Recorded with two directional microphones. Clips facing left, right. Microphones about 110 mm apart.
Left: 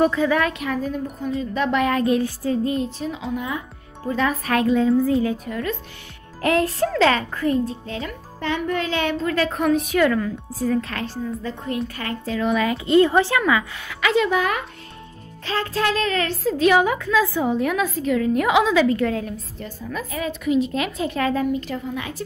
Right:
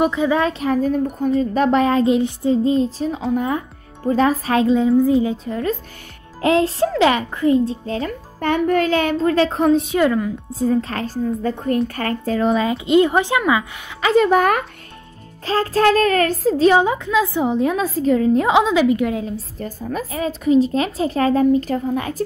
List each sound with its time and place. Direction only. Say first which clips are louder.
0.0 s a woman's voice: right 1 dB; 15° right (ahead or behind)
0.4 s a child's voice: right 4 dB; 30° right (ahead or behind)
0.8 s a child's voice: right 7 dB; 45° right (ahead or behind)
3.3 s speech: right 7 dB; 45° right (ahead or behind)
4.1 s a woman's voice: right 5 dB; 35° right (ahead or behind); by 7.7 s 20° right (ahead or behind)
7.8 s a child's voice: right 6 dB; 35° right (ahead or behind); by 13.9 s 20° right (ahead or behind)
14.0 s speech: right 5 dB; 45° right (ahead or behind)
15.4 s a child's voice: right 7 dB; 40° right (ahead or behind)
16.5 s a woman's voice: right 2 dB; 30° right (ahead or behind)
19.3 s a child's voice: right 5 dB; 45° right (ahead or behind)